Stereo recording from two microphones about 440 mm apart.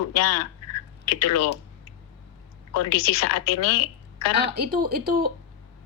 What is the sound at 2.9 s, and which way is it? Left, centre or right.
Speech, left.